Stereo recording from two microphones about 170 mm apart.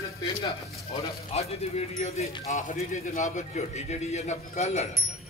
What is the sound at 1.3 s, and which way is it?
A man's voice, 35° left (ahead or behind).